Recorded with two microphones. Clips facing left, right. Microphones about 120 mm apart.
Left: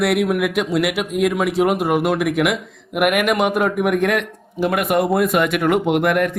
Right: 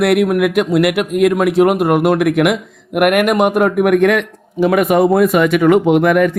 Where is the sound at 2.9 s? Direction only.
55° right (ahead or behind).